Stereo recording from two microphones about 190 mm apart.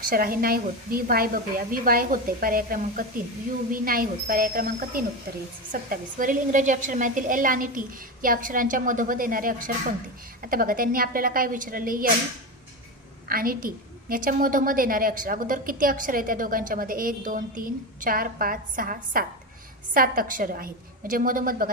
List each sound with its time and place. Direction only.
0.0 s a woman's voice: 50° right (ahead or behind)
13.2 s a woman's voice: 50° right (ahead or behind)